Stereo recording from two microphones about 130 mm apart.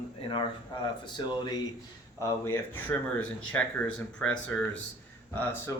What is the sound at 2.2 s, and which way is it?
Speech, 20° left (ahead or behind).